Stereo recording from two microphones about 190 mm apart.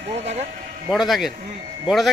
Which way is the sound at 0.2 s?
35° right (ahead or behind).